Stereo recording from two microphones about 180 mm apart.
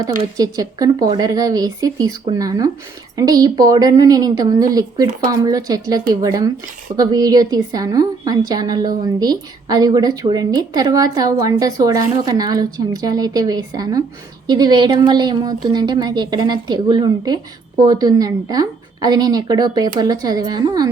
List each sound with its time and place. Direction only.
0.3 s a woman's voice: 20° right (ahead or behind)